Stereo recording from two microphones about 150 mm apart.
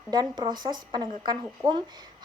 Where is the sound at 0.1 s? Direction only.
25° right (ahead or behind).